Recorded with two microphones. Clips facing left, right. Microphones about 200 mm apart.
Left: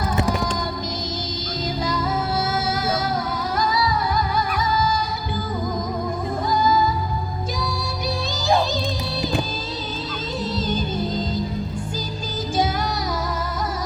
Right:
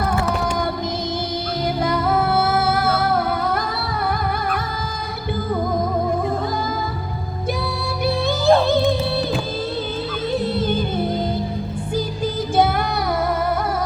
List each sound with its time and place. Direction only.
1.8 s music: 60° right (ahead or behind)
6.5 s music: 60° right (ahead or behind)
8.4 s music: 60° right (ahead or behind)
10.4 s music: 60° right (ahead or behind)
12.5 s music: 60° right (ahead or behind)